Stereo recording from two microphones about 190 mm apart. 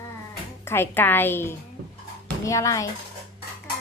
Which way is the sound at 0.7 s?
10° left (ahead or behind).